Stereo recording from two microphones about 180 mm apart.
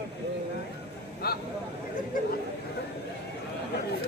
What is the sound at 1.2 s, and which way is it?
Vehicle, 60° left (ahead or behind).